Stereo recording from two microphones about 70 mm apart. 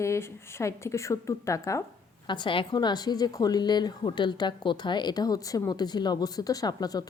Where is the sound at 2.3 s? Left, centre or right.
Left.